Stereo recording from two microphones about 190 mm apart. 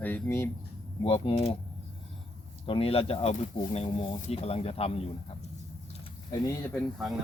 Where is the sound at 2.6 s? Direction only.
30° left (ahead or behind).